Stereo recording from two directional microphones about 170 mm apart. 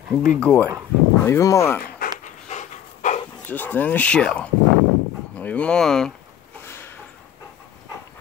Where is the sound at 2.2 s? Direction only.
45° left (ahead or behind).